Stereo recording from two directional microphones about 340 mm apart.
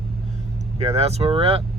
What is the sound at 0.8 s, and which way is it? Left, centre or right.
Speech, centre.